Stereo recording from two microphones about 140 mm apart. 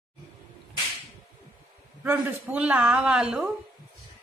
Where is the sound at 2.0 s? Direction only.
15° right (ahead or behind).